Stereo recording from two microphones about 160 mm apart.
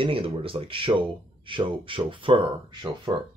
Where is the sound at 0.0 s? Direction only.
35° right (ahead or behind).